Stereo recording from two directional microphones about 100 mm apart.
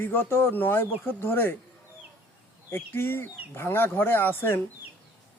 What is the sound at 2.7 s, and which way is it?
Speech, 20° left (ahead or behind).